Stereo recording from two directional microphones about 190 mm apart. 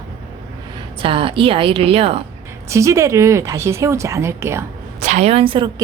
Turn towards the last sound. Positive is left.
turn(degrees=-25)  # may be behind; listen again after turning